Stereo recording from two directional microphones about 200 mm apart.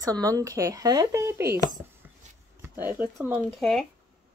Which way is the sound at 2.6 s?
10° right (ahead or behind).